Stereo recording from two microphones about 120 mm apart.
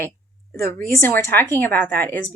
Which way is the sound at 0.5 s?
25° left (ahead or behind).